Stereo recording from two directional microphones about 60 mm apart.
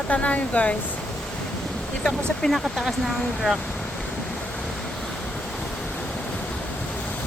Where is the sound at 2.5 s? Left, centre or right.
Centre.